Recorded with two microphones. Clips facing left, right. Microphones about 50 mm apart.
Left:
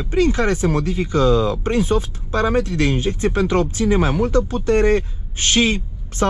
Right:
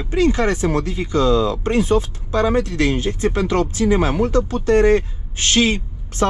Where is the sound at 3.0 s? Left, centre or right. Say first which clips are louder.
Even; left.